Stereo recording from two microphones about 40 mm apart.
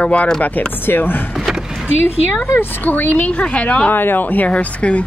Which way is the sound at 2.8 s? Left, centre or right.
Left.